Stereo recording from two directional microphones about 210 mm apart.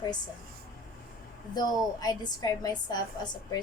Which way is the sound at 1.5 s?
20° left (ahead or behind).